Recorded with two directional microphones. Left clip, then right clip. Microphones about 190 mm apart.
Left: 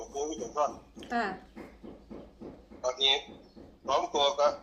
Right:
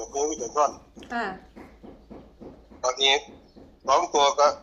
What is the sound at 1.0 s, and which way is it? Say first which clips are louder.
Speech: right 1 dB; centre (ahead or behind).